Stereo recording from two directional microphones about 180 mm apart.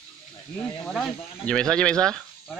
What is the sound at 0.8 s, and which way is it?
Speech, centre (ahead or behind).